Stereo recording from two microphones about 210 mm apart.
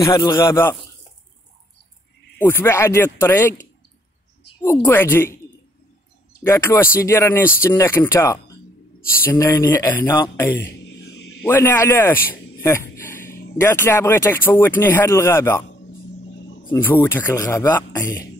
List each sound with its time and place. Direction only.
0.0 s speech: 15° left (ahead or behind)
2.3 s speech: 10° left (ahead or behind)
4.6 s speech: 10° left (ahead or behind)
6.4 s speech: 10° left (ahead or behind)
16.7 s speech: 10° left (ahead or behind)